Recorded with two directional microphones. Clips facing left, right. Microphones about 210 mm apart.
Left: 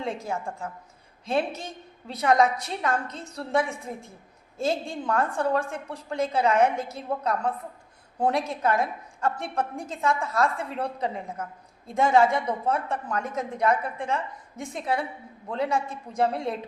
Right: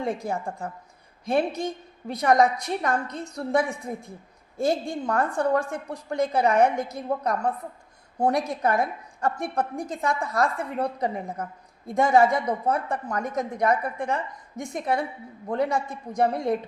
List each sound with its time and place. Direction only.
0.2 s a woman's voice: 15° right (ahead or behind)